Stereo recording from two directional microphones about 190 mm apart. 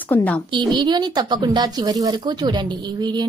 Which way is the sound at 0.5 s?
25° right (ahead or behind).